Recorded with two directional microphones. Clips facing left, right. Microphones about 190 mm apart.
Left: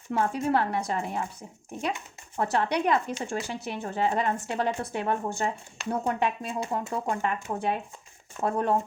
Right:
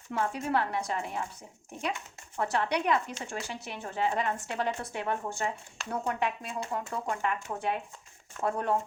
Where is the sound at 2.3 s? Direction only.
35° left (ahead or behind).